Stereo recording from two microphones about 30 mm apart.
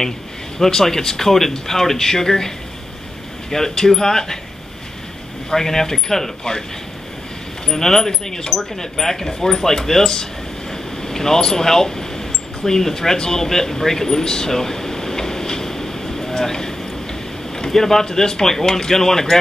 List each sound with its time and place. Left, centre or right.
0.6 s speech: centre
5.5 s speech: centre
7.6 s speech: centre
10.7 s a sound: centre
17.6 s speech: centre